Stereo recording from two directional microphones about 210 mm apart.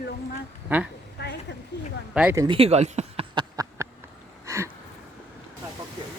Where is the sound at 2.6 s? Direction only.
30° right (ahead or behind).